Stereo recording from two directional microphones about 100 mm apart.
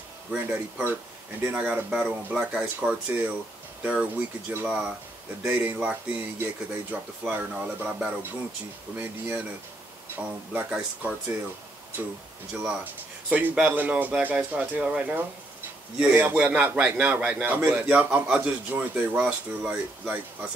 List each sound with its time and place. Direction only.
0.3 s a man's voice: 10° right (ahead or behind)
13.3 s a man's voice: 15° right (ahead or behind)